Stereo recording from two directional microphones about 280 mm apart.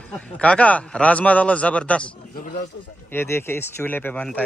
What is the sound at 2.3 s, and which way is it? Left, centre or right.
Speech, left.